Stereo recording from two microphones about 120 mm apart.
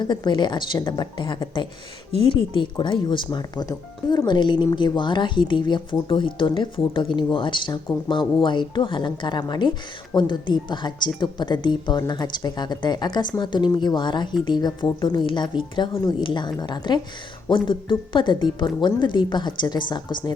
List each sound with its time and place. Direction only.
0.0 s speech: 40° left (ahead or behind)